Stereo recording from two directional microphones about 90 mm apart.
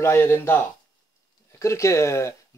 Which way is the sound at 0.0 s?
30° left (ahead or behind).